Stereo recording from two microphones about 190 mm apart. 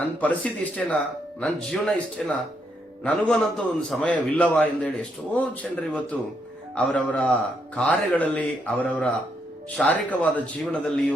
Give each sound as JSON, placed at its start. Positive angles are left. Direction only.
{"t": 0.0, "sound": "a man's voice", "side_deg": 10}